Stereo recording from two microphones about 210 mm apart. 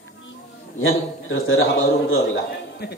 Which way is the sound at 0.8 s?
70° left (ahead or behind).